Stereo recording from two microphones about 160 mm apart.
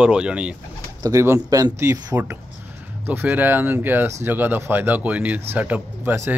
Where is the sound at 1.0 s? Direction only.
15° right (ahead or behind).